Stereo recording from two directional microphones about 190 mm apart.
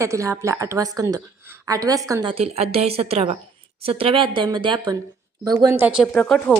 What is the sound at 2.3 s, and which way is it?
A woman's voice, 30° right (ahead or behind).